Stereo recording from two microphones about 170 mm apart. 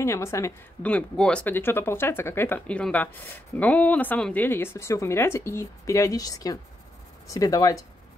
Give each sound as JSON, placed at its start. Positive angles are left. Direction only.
{"t": 0.0, "sound": "speech", "side_deg": 15}